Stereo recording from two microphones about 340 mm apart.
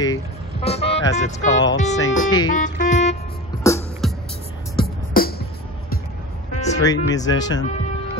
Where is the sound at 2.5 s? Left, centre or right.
Left.